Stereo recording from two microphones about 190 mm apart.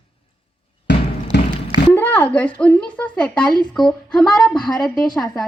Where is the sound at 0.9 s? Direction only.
65° left (ahead or behind).